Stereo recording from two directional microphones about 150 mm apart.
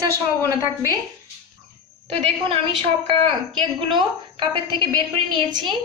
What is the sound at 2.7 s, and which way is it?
A woman's voice, 35° right (ahead or behind).